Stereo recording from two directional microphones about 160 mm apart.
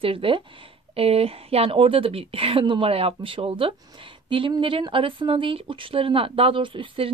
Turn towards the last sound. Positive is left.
turn(degrees=-35)  # may be behind; listen again after turning